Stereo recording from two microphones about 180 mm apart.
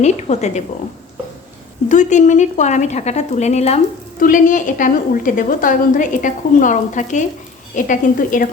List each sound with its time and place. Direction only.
0.0 s a woman's voice: 40° left (ahead or behind)
1.9 s a woman's voice: 45° left (ahead or behind)